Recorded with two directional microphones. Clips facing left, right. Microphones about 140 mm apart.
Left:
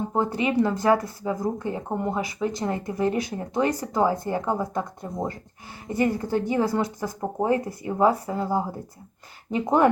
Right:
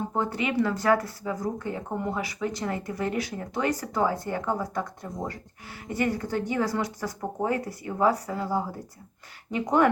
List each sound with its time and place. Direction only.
0.1 s speech: 25° left (ahead or behind)